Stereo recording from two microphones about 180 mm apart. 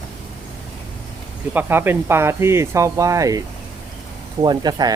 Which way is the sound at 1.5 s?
10° right (ahead or behind).